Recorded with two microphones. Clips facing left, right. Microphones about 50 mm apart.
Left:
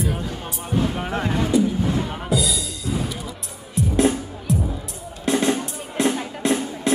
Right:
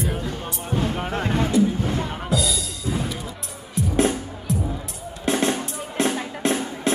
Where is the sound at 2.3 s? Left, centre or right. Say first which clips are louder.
Left 1 dB; centre.